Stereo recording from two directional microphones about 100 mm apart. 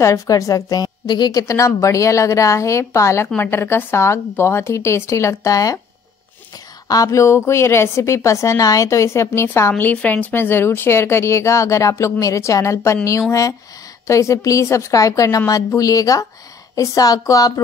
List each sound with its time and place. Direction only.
0.0 s a woman's voice: 30° left (ahead or behind)
6.9 s a woman's voice: 35° left (ahead or behind)